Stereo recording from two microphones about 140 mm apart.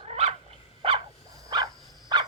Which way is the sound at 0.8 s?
40° right (ahead or behind).